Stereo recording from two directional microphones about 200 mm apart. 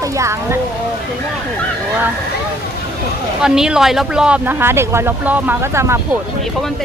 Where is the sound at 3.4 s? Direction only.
5° right (ahead or behind).